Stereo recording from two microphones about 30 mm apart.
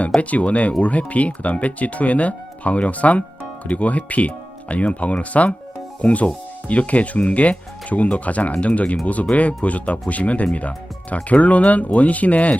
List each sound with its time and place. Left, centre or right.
0.2 s speech: left